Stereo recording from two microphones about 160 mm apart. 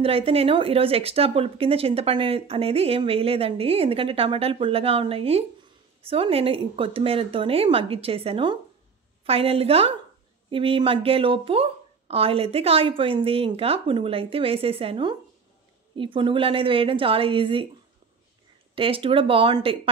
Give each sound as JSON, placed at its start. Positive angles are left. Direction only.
{"t": 0.0, "sound": "speech", "side_deg": -35}
{"t": 18.8, "sound": "speech", "side_deg": -35}